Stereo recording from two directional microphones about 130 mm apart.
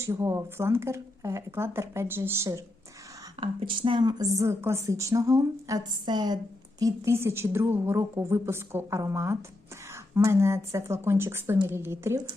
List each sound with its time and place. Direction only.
0.0 s a woman's voice: 20° right (ahead or behind)
3.4 s a woman's voice: 40° right (ahead or behind); by 12.2 s 20° right (ahead or behind)